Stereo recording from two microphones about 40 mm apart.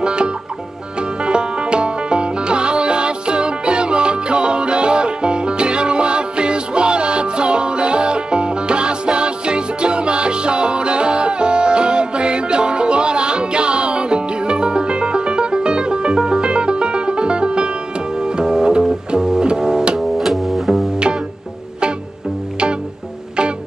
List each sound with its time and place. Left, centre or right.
0.0 s music: right
20.2 s music: centre